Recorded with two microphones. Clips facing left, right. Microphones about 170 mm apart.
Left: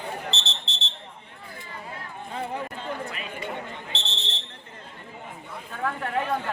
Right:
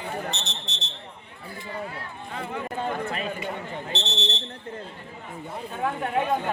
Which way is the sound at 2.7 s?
40° right (ahead or behind).